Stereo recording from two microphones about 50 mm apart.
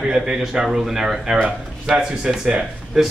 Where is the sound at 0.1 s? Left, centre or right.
Centre.